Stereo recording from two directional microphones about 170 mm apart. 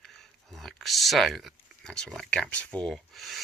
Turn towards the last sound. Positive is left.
turn(degrees=0)  # may be behind; listen again after turning